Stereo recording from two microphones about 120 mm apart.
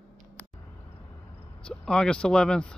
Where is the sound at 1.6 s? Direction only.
5° left (ahead or behind).